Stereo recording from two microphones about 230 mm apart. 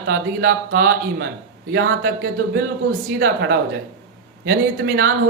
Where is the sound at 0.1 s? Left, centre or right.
Right.